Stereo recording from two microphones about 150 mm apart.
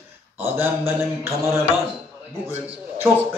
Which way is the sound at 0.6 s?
15° right (ahead or behind).